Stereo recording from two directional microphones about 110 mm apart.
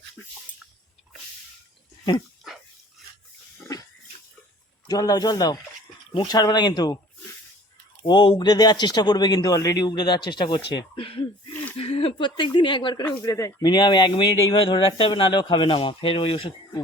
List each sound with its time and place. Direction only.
0.2 s dog: 15° left (ahead or behind)
4.9 s a man's voice: 35° left (ahead or behind)
8.0 s a man's voice: 45° left (ahead or behind)
13.2 s speech: 30° left (ahead or behind)
13.6 s speech: 40° left (ahead or behind)